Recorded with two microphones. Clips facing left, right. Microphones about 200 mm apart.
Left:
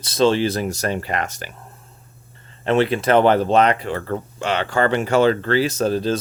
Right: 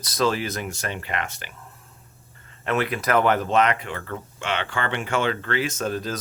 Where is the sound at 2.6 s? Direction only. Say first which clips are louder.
Left 7 dB; 30° left (ahead or behind).